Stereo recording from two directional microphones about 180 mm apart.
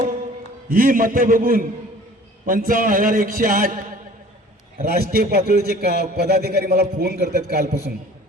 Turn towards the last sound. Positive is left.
turn(degrees=-55)  # may be behind; listen again after turning